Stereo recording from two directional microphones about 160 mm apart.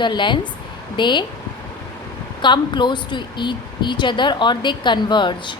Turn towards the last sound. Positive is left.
turn(degrees=30)  # may be behind; listen again after turning